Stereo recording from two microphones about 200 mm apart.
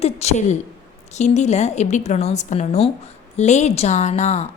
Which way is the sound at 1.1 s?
35° left (ahead or behind).